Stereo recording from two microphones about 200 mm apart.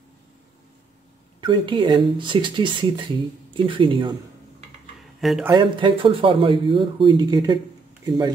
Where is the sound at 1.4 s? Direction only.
25° right (ahead or behind).